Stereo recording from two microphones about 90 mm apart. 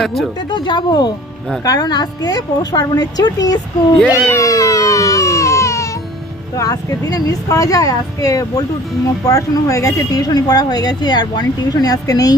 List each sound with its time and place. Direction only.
0.0 s speech: 5° left (ahead or behind)
0.5 s speech: 60° left (ahead or behind)
3.9 s speech: 15° left (ahead or behind)
4.4 s baby cry: 40° left (ahead or behind)
6.6 s speech: 45° left (ahead or behind)